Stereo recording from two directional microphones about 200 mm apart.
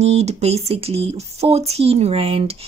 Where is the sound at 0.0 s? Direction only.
35° right (ahead or behind).